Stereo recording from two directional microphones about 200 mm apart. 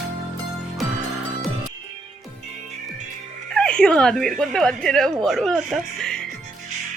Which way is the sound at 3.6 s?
5° left (ahead or behind).